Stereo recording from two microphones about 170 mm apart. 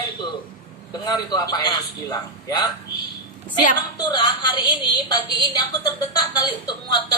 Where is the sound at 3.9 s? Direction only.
25° left (ahead or behind).